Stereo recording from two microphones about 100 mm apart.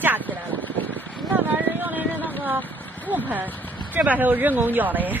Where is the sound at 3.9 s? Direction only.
15° right (ahead or behind).